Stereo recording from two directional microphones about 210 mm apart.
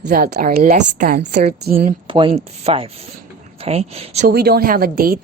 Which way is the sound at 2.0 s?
25° right (ahead or behind).